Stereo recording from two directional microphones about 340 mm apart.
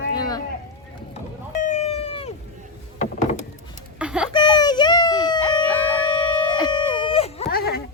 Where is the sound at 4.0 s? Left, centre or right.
Centre.